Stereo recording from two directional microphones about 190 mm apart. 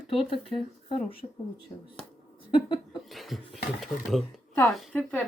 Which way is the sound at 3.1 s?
Centre (ahead or behind).